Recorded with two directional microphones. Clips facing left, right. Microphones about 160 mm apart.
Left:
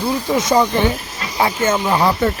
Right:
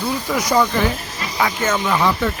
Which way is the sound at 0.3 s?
25° left (ahead or behind).